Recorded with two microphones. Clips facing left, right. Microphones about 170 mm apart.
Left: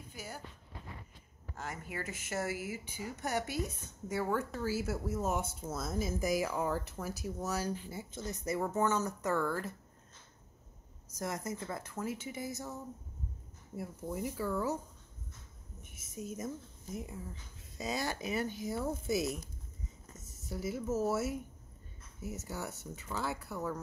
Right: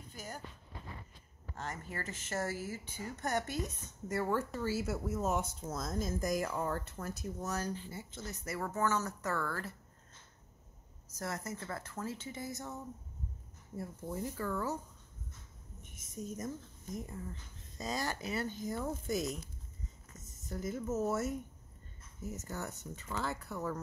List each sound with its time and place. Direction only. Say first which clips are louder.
0.1 s a sound: even; 10° left (ahead or behind)
1.6 s speech: left 1 dB; 10° left (ahead or behind)
11.1 s speech: left 2 dB; 15° left (ahead or behind)
15.8 s speech: even; 5° left (ahead or behind)
20.4 s speech: left 1 dB; 5° left (ahead or behind)